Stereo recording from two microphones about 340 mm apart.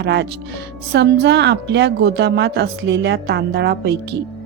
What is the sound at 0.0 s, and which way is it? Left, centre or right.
Speech, right.